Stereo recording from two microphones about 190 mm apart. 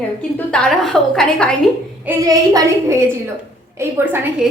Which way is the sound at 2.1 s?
20° right (ahead or behind).